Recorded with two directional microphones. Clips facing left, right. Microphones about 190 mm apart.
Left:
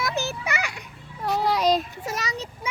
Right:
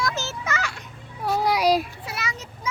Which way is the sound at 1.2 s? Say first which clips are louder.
Right 1 dB; 15° right (ahead or behind).